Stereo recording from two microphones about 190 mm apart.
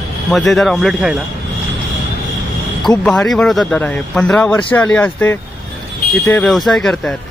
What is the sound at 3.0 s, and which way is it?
Speech, 5° left (ahead or behind).